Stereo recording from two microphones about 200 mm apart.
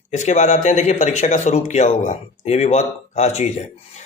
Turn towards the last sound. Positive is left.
turn(degrees=35)  # may be behind; listen again after turning